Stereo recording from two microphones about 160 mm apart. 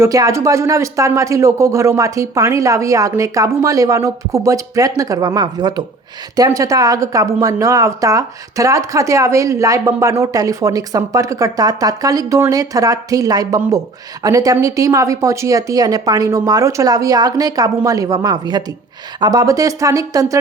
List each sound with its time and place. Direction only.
0.0 s speech: 20° right (ahead or behind)